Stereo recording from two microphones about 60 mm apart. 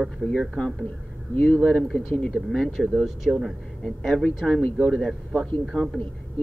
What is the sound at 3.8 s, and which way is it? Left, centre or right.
Speech, centre.